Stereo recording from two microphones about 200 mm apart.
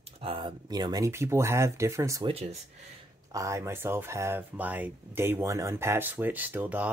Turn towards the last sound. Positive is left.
turn(degrees=-10)  # may be behind; listen again after turning